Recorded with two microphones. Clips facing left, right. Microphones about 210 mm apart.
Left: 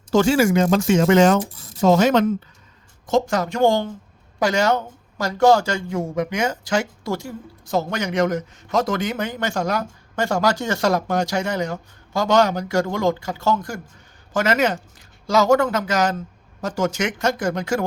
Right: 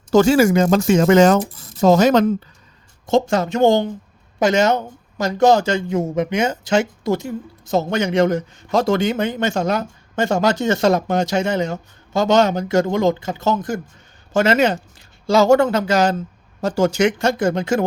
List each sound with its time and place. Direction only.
0.1 s speech: 40° right (ahead or behind)
3.1 s a man's voice: 25° right (ahead or behind)